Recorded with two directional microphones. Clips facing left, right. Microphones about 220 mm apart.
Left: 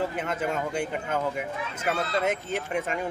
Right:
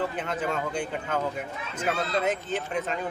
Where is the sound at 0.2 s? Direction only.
10° left (ahead or behind).